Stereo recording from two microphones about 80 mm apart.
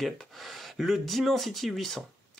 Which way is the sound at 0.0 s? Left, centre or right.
Centre.